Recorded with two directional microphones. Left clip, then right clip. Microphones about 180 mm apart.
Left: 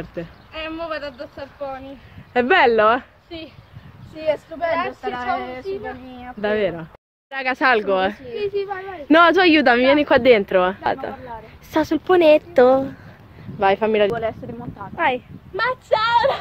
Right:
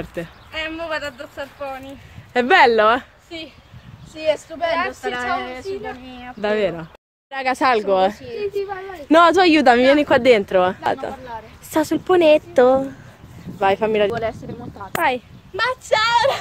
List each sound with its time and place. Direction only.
0.0 s a woman's voice: 15° right (ahead or behind)
2.3 s speech: 20° right (ahead or behind)
3.3 s speech: centre (ahead or behind)
4.2 s speech: 45° left (ahead or behind)
6.4 s a woman's voice: 15° right (ahead or behind)
14.4 s speech: 50° left (ahead or behind)
15.0 s a woman's voice: 10° right (ahead or behind)